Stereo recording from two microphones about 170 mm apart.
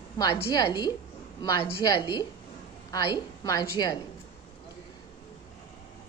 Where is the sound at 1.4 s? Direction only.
25° left (ahead or behind).